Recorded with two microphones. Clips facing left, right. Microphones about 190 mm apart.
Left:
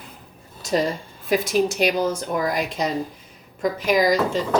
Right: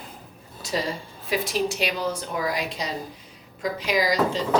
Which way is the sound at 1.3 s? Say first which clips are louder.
Left 5 dB; 50° left (ahead or behind).